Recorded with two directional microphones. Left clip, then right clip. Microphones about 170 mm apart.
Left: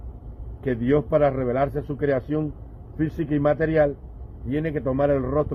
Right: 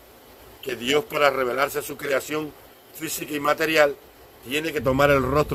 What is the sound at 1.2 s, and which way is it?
A man's voice, 20° right (ahead or behind).